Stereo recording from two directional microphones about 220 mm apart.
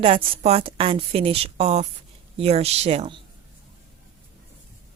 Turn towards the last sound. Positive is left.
turn(degrees=-30)  # may be behind; listen again after turning